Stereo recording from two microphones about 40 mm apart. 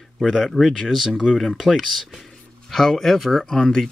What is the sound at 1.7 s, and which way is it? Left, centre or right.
Speech, centre.